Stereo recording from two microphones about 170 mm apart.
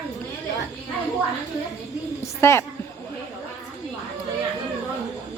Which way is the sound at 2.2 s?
15° left (ahead or behind).